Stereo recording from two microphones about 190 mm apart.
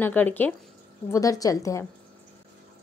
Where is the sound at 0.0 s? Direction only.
10° left (ahead or behind).